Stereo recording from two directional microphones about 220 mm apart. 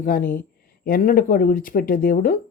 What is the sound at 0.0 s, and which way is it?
Speech, 40° left (ahead or behind).